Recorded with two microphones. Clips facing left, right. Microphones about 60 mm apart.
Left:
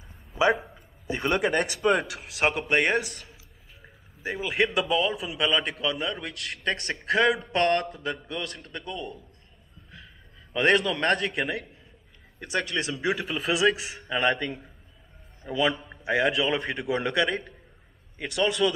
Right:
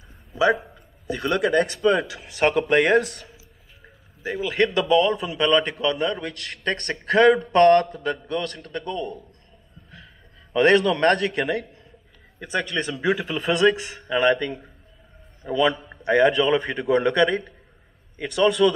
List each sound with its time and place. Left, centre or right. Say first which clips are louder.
0.7 s a sound: right 2 dB; left
1.6 s a man's voice: right 4 dB; centre
10.5 s a man's voice: right 5 dB; centre